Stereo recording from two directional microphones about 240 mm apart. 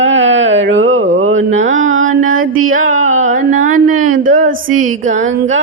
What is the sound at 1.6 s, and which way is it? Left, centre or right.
Mantra, right.